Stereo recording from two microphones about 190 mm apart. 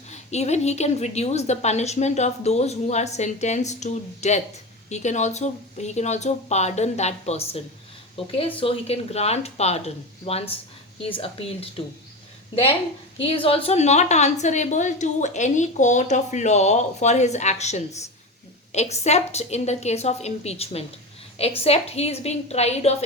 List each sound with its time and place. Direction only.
0.1 s a woman's voice: 35° left (ahead or behind)
13.1 s a woman's voice: 30° left (ahead or behind)